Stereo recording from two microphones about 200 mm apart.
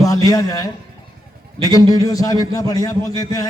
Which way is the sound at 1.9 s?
20° left (ahead or behind).